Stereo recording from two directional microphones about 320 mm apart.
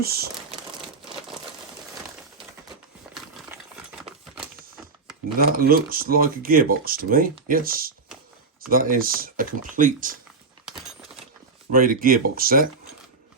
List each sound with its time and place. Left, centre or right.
0.0 s speech: right
5.5 s speech: right
11.7 s speech: right